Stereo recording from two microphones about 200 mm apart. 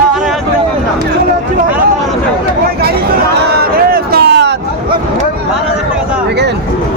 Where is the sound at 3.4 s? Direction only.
50° right (ahead or behind).